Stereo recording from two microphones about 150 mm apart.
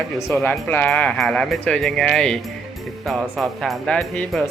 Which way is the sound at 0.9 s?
5° left (ahead or behind).